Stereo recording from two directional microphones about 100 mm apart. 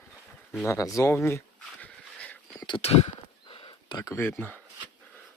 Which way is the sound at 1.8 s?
15° left (ahead or behind).